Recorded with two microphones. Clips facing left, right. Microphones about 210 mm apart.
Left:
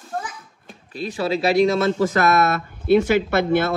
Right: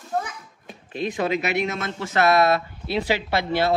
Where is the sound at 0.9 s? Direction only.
35° left (ahead or behind).